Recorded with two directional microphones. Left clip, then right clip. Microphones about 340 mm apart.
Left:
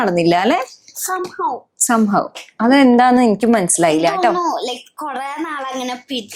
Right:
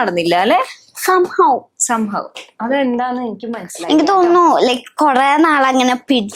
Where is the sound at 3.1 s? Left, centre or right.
Left.